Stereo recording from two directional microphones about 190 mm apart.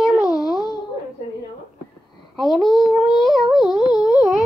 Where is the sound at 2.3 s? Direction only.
Centre (ahead or behind).